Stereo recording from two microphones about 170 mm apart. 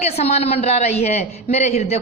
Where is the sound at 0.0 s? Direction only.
40° left (ahead or behind).